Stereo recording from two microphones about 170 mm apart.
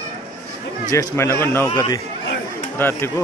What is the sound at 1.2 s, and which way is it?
Speech, 15° left (ahead or behind).